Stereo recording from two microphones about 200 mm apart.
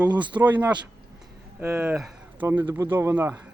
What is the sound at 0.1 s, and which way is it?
Speech, 25° right (ahead or behind).